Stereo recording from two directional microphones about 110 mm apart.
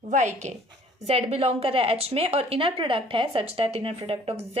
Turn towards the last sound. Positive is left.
turn(degrees=-65)  # may be behind; listen again after turning